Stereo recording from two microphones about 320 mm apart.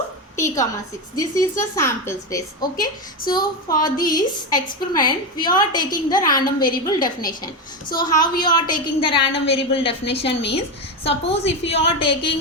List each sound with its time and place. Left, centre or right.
0.3 s a woman's voice: centre